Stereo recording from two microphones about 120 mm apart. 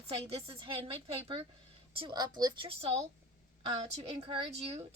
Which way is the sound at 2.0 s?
35° right (ahead or behind).